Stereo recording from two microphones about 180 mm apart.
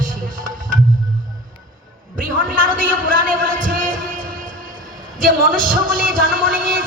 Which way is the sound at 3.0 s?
50° right (ahead or behind).